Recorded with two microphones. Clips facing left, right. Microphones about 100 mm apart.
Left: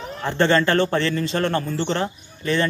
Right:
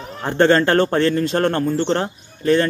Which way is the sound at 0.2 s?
45° right (ahead or behind).